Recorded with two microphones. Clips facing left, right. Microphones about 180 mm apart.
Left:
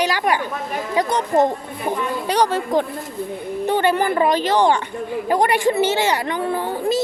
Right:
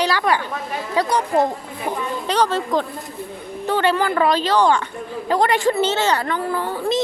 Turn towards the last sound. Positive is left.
turn(degrees=15)  # may be behind; listen again after turning